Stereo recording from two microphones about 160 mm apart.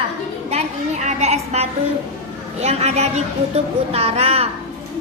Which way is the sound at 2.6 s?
40° right (ahead or behind).